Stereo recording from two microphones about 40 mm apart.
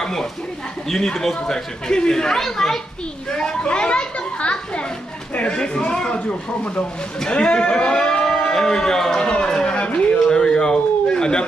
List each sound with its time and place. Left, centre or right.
0.0 s speech: centre
3.3 s a child's voice: left
10.2 s a sound: left